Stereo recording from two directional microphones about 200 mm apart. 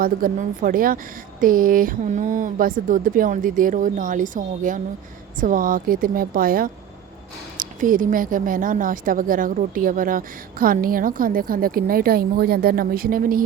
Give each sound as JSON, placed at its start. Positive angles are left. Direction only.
{"t": 0.0, "sound": "a woman's voice", "side_deg": -45}